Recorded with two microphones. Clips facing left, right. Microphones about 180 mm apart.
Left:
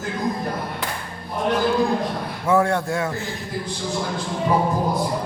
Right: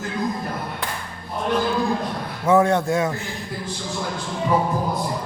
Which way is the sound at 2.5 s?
20° right (ahead or behind).